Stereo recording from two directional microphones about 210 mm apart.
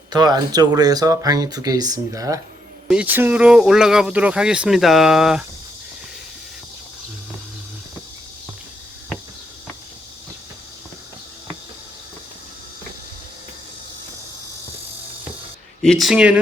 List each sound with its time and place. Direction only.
0.1 s speech: 20° right (ahead or behind); by 5.5 s 5° right (ahead or behind)
15.8 s speech: centre (ahead or behind)